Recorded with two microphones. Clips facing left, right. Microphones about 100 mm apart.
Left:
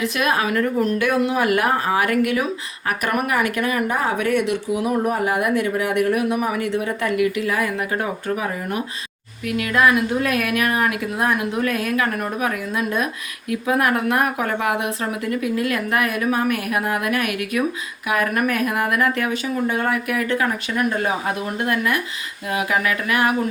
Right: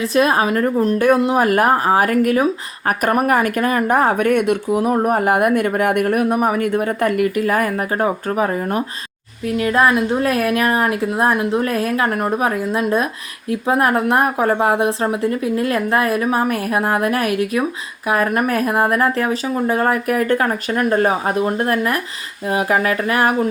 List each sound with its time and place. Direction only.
0.0 s a woman's voice: 35° right (ahead or behind)